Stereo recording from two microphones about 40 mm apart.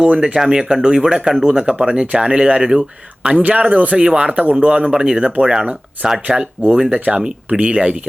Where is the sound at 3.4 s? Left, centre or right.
Right.